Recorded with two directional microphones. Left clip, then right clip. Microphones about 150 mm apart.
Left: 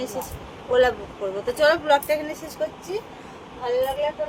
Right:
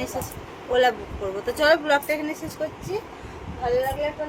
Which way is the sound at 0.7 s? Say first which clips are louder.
Left 1 dB; 5° right (ahead or behind).